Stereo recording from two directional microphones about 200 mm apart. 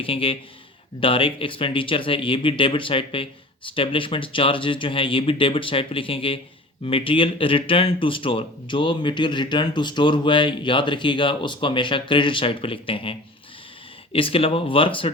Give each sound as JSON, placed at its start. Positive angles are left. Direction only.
{"t": 0.0, "sound": "speech", "side_deg": 25}